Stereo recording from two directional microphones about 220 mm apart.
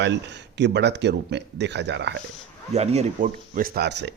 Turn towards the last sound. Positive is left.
turn(degrees=-50)  # may be behind; listen again after turning